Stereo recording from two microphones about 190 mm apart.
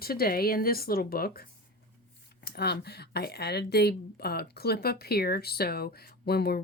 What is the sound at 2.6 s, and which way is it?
A woman's voice, 60° left (ahead or behind).